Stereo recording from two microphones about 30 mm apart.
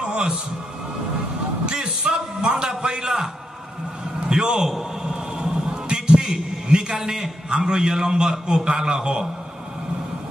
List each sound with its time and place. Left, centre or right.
0.1 s music: right
1.7 s a sound: right
4.3 s a man's voice: right
4.6 s a man's voice: centre
5.4 s a sound: right
7.4 s a man's voice: right